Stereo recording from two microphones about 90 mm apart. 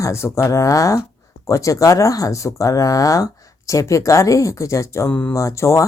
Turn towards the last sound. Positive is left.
turn(degrees=35)  # may be behind; listen again after turning